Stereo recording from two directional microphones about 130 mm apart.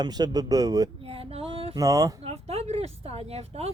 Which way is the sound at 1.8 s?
25° right (ahead or behind).